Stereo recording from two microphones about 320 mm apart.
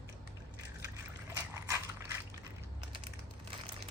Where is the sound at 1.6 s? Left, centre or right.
Centre.